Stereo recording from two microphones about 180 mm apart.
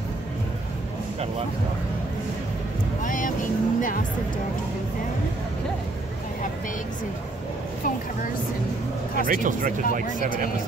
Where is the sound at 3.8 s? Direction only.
50° left (ahead or behind).